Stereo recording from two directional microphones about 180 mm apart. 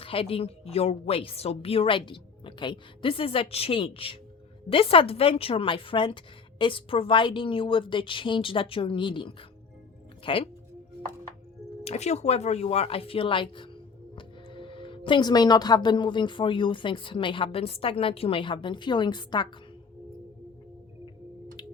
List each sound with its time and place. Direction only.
0.0 s a woman's voice: 30° left (ahead or behind)
11.9 s a woman's voice: 35° left (ahead or behind)